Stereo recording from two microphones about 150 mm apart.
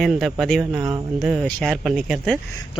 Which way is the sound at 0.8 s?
20° right (ahead or behind).